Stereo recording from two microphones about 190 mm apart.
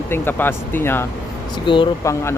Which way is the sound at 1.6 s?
25° left (ahead or behind).